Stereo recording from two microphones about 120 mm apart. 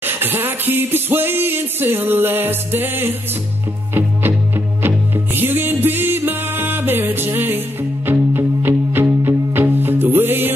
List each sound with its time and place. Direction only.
0.0 s music: 20° right (ahead or behind)